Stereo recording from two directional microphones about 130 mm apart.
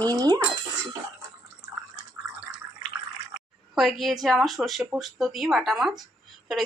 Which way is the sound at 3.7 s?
Centre (ahead or behind).